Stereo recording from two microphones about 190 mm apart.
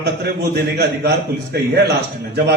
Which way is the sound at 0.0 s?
60° right (ahead or behind).